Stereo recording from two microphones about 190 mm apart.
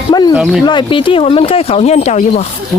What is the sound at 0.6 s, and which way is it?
Speech, 25° left (ahead or behind).